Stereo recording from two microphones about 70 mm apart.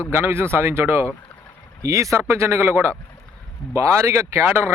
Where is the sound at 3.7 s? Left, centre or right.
Right.